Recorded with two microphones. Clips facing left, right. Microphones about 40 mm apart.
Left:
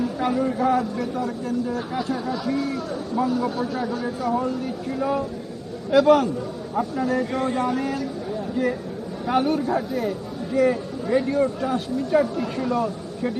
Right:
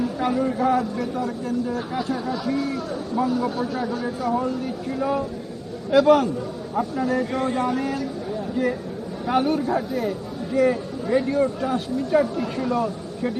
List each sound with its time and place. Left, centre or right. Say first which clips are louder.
0.0 s a man's voice: even; centre